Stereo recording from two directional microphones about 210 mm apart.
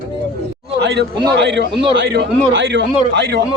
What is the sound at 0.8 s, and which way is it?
A man's voice, 50° right (ahead or behind).